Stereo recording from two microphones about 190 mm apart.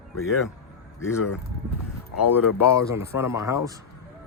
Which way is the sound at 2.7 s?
15° right (ahead or behind).